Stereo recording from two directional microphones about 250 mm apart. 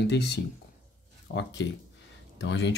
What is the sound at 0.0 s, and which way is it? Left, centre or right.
Speech, left.